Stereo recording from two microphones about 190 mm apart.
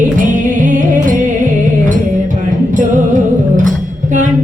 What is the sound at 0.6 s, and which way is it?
Music, 45° right (ahead or behind).